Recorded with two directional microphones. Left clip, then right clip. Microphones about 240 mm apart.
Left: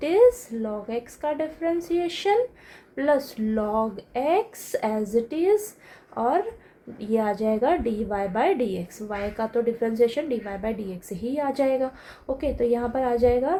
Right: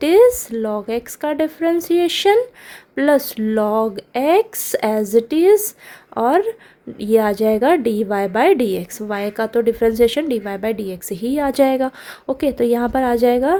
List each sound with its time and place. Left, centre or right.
0.0 s a woman's voice: right